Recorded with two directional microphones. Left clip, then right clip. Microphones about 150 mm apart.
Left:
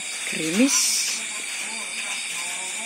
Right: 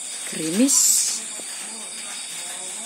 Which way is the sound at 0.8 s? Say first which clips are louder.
Right 1 dB; 45° right (ahead or behind).